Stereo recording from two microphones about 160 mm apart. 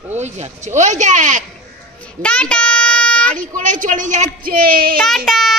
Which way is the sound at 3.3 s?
55° right (ahead or behind).